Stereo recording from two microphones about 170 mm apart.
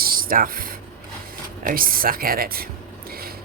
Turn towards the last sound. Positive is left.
turn(degrees=-60)  # may be behind; listen again after turning